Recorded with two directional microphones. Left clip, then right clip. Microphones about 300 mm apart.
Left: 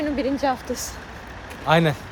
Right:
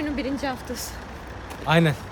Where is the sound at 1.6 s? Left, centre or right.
Centre.